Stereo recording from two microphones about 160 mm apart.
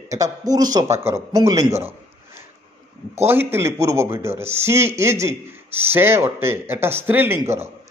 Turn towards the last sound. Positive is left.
turn(degrees=-10)  # may be behind; listen again after turning